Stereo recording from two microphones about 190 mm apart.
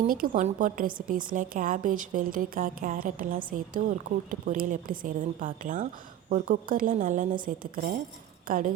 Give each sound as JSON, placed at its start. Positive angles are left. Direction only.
{"t": 0.1, "sound": "a woman's voice", "side_deg": -45}